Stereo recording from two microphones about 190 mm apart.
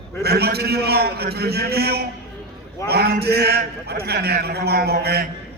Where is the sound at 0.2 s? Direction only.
55° right (ahead or behind).